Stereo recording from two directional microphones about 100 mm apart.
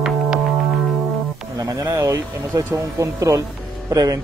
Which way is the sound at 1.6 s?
35° right (ahead or behind).